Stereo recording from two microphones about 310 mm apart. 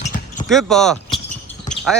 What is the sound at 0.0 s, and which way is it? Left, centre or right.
Basketball bounce, left.